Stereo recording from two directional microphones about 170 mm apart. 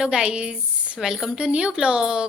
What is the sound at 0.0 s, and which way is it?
A woman's voice, 5° right (ahead or behind).